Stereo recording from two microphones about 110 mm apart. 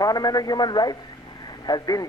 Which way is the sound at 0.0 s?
35° left (ahead or behind).